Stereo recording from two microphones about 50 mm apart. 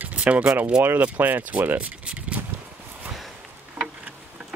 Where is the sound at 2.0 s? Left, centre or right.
Right.